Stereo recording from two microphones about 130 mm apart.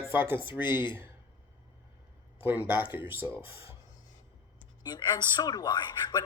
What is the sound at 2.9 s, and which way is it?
Speech, 40° left (ahead or behind).